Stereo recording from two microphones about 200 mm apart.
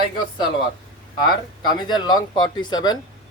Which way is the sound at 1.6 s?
20° left (ahead or behind).